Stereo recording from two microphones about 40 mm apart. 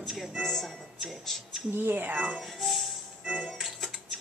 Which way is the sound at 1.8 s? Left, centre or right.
Right.